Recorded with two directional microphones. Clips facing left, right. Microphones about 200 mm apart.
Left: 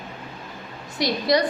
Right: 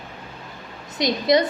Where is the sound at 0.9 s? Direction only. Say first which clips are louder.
Right 2 dB; 20° right (ahead or behind).